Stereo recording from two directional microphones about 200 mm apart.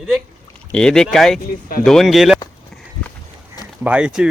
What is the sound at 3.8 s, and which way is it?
Speech, 5° right (ahead or behind).